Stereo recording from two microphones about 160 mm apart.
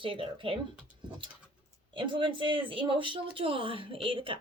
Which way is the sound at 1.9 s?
30° right (ahead or behind).